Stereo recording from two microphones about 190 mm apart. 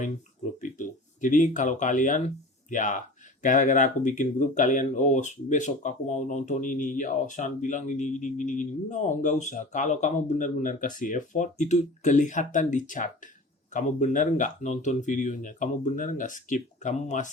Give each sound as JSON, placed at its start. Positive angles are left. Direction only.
{"t": 0.6, "sound": "speech", "side_deg": 40}